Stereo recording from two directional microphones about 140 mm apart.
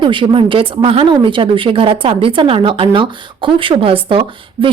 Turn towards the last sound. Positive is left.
turn(degrees=-40)  # may be behind; listen again after turning